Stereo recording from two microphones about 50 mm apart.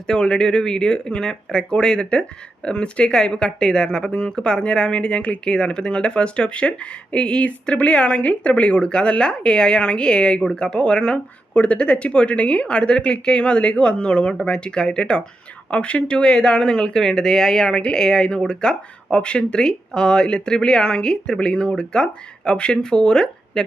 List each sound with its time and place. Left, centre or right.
0.1 s speech: centre